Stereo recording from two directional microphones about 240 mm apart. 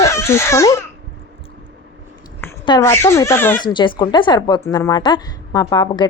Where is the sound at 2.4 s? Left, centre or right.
Centre.